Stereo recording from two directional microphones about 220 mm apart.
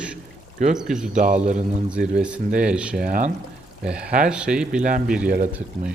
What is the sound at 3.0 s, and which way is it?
Speech, 40° right (ahead or behind).